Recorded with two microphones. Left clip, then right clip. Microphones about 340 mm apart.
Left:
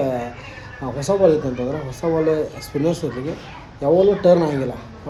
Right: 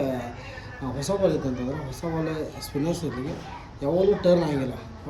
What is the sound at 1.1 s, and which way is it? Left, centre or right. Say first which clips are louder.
Speech: left 8 dB; left.